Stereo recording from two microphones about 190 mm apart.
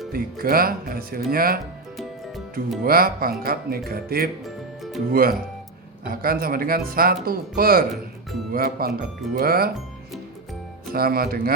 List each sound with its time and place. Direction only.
0.1 s speech: 50° right (ahead or behind)
2.8 s speech: 50° right (ahead or behind)
4.4 s music: centre (ahead or behind)
5.1 s speech: 50° right (ahead or behind)
10.9 s speech: 50° right (ahead or behind)